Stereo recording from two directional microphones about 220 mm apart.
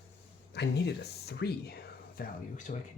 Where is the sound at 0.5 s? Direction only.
50° left (ahead or behind).